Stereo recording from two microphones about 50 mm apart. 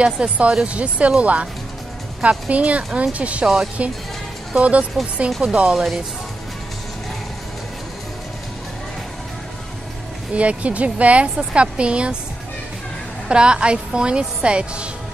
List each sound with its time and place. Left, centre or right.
0.0 s speech: right
2.5 s speech: right
10.3 s speech: right
13.3 s speech: centre